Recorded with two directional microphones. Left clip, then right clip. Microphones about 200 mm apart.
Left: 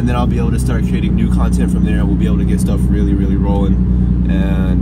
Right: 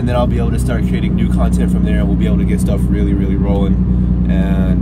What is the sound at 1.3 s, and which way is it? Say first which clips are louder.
Speech: right 1 dB; centre (ahead or behind).